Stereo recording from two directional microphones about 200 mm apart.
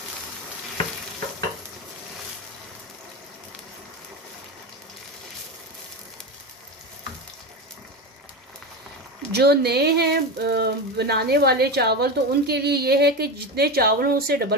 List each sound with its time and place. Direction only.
9.3 s speech: 55° right (ahead or behind)